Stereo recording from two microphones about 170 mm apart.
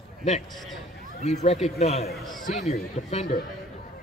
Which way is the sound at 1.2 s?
40° left (ahead or behind).